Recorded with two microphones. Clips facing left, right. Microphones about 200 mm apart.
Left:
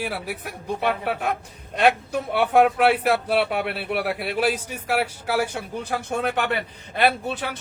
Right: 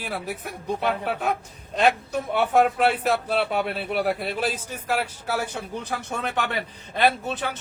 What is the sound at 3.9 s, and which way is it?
Speech, 45° right (ahead or behind).